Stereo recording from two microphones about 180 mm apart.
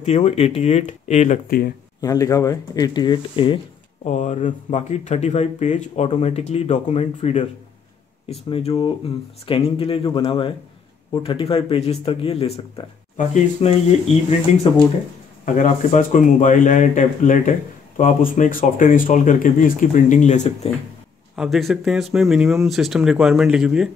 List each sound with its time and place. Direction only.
0.0 s speech: 35° left (ahead or behind)
2.0 s speech: 20° left (ahead or behind)
4.0 s speech: 40° left (ahead or behind)
21.4 s speech: centre (ahead or behind)